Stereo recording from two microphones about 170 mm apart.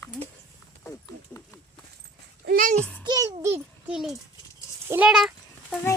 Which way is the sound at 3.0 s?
20° right (ahead or behind).